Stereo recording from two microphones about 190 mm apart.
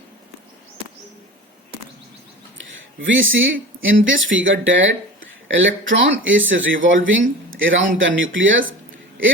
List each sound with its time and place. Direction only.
3.1 s speech: 90° right